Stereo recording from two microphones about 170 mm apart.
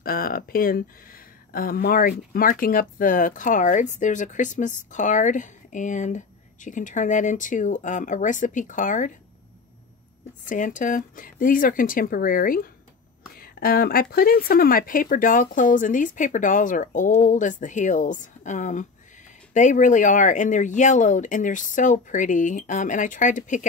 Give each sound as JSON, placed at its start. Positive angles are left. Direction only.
{"t": 0.0, "sound": "speech", "side_deg": 60}
{"t": 10.5, "sound": "speech", "side_deg": 50}